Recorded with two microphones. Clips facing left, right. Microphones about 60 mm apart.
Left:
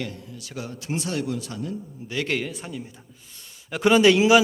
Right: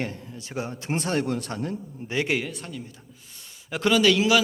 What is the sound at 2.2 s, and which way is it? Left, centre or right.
Speech, centre.